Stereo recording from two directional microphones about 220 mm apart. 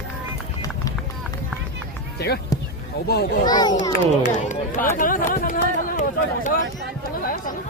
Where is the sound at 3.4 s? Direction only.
20° left (ahead or behind).